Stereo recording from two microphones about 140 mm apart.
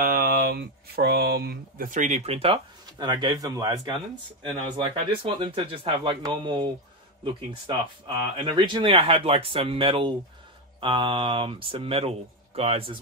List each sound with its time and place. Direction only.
0.0 s speech: 90° right; by 3.9 s 30° right (ahead or behind)
4.4 s speech: 40° right (ahead or behind)